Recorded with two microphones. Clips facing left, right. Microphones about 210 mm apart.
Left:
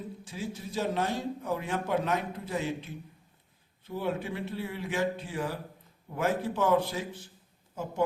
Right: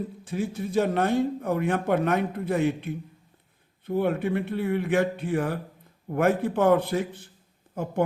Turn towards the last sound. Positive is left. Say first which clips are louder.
# right 5 dB
turn(degrees=-60)  # may be behind; listen again after turning